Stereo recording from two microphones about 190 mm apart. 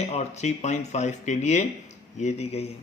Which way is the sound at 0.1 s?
35° left (ahead or behind).